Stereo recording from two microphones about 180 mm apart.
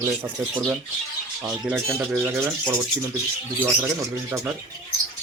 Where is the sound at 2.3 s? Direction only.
15° right (ahead or behind).